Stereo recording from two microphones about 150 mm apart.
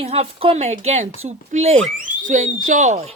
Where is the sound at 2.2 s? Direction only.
60° right (ahead or behind).